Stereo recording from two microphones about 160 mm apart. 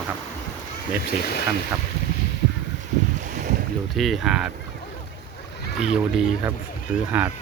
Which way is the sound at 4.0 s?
Centre (ahead or behind).